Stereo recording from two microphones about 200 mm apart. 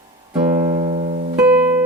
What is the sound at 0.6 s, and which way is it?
Music, 30° right (ahead or behind).